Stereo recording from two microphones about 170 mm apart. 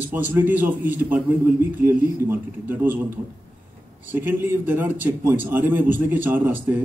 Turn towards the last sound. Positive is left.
turn(degrees=-10)  # may be behind; listen again after turning